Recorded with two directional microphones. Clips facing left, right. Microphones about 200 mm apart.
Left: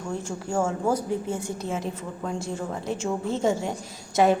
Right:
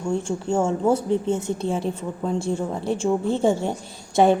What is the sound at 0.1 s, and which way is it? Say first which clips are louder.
A woman's voice: right 6 dB; 25° right (ahead or behind).